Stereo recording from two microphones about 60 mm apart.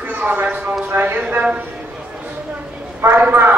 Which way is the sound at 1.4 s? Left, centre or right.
Centre.